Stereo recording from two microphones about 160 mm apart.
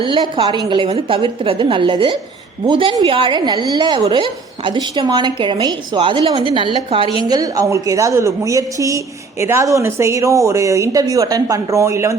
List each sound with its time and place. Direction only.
0.0 s a woman's voice: 30° right (ahead or behind)